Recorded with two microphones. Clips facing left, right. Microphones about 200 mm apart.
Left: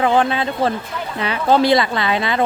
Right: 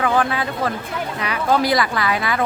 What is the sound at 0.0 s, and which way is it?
Speech, 25° left (ahead or behind).